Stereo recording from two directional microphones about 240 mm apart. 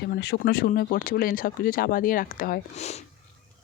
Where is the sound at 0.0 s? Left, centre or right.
Left.